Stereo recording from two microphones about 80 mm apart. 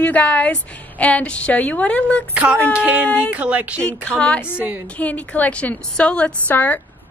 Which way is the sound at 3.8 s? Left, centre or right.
Centre.